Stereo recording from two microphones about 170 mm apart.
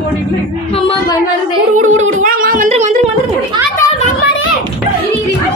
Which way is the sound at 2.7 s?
45° right (ahead or behind).